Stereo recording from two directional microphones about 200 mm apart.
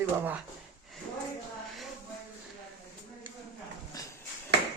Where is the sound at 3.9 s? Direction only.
20° left (ahead or behind).